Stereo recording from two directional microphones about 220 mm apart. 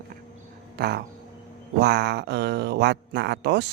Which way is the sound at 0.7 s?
45° right (ahead or behind).